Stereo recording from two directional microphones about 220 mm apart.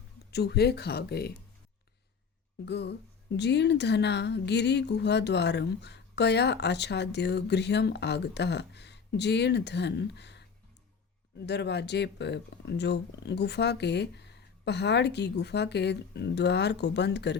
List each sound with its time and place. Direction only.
0.3 s speech: 45° left (ahead or behind)
2.6 s speech: 50° left (ahead or behind)